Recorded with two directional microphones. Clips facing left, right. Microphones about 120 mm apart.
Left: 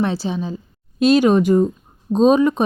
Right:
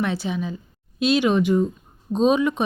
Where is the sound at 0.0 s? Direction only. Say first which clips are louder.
Left 4 dB; 30° left (ahead or behind).